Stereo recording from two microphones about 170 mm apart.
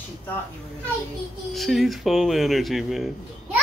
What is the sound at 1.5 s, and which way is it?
Speech, centre (ahead or behind).